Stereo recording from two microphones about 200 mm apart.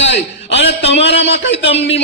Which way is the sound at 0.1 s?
60° left (ahead or behind).